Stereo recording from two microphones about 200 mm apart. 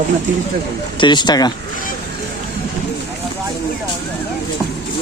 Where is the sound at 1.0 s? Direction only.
20° left (ahead or behind).